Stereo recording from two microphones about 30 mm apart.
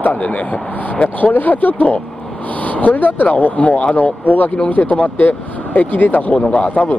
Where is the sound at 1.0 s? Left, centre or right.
Left.